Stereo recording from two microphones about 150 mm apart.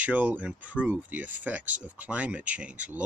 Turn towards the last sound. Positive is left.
turn(degrees=-10)  # may be behind; listen again after turning